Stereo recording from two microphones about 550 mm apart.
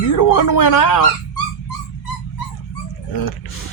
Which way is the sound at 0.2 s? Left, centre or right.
Left.